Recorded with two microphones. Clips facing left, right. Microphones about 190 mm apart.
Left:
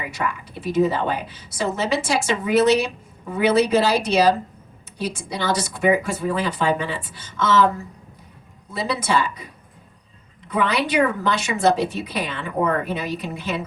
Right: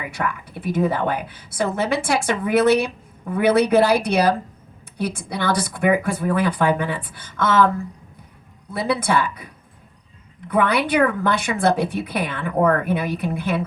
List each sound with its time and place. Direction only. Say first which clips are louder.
0.1 s a woman's voice: right 1 dB; 55° right (ahead or behind)
8.7 s a woman's voice: right 2 dB; 55° right (ahead or behind)
10.5 s a woman's voice: right 2 dB; 55° right (ahead or behind)